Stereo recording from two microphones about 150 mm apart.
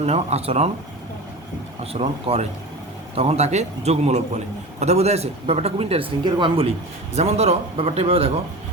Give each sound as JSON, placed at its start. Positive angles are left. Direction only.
{"t": 0.0, "sound": "a man's voice", "side_deg": -45}
{"t": 1.8, "sound": "a man's voice", "side_deg": -45}